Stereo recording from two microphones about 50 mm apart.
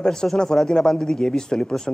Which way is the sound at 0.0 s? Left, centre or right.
Centre.